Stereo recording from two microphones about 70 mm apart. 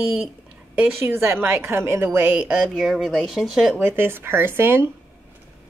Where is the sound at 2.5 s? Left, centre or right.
Centre.